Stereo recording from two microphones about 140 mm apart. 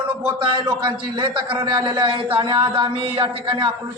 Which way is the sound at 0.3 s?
35° right (ahead or behind).